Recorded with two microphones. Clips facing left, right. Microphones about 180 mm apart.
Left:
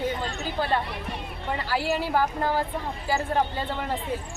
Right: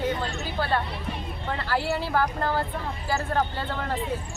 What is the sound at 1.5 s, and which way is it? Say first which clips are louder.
Speech: left 1 dB; 10° left (ahead or behind).